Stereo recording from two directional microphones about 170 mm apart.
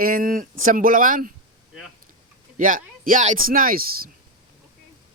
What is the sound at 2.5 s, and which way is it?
A man's voice, 50° right (ahead or behind).